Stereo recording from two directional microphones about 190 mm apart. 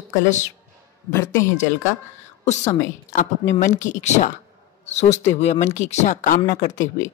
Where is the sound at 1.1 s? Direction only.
15° left (ahead or behind).